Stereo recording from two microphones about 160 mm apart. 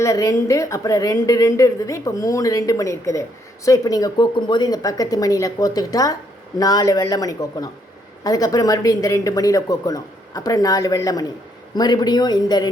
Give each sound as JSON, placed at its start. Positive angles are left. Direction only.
{"t": 0.0, "sound": "a woman's voice", "side_deg": 20}